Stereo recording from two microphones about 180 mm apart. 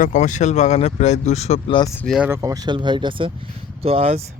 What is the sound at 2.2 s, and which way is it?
Speech, 15° right (ahead or behind).